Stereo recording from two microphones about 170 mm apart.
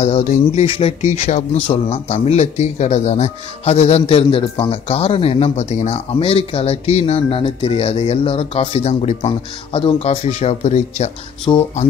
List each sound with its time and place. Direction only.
0.0 s speech: 40° left (ahead or behind)